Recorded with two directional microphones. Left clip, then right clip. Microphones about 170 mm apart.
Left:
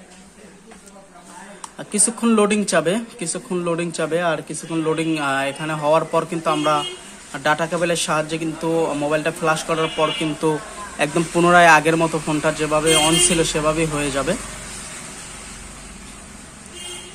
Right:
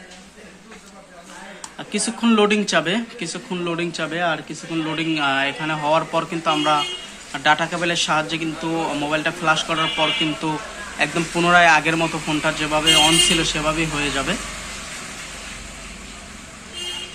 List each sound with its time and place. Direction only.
1.8 s speech: 50° left (ahead or behind)
11.0 s speech: 35° left (ahead or behind)